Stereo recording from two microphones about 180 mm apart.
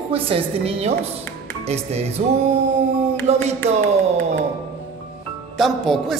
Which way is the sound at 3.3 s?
35° right (ahead or behind).